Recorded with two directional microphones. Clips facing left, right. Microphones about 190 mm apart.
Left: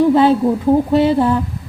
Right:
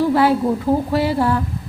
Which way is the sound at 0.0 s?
20° left (ahead or behind).